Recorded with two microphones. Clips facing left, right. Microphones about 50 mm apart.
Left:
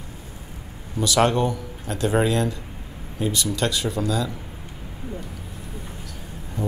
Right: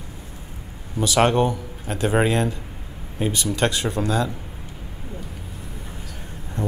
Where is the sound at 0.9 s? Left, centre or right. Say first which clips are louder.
Right 1 dB; right.